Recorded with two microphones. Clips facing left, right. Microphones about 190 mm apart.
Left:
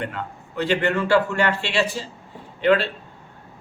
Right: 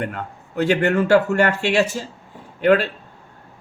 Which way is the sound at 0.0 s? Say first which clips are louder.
Right 2 dB; 45° right (ahead or behind).